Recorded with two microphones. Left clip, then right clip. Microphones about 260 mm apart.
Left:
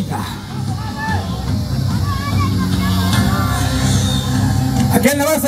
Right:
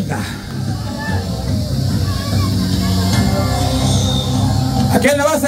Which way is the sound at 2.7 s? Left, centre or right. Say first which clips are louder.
Even; left.